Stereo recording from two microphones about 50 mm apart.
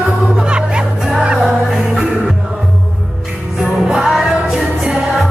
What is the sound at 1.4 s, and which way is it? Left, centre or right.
Music, centre.